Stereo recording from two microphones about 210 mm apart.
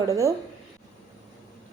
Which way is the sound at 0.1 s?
15° right (ahead or behind).